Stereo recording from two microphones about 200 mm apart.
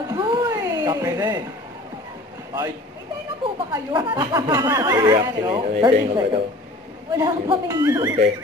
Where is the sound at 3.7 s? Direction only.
20° right (ahead or behind).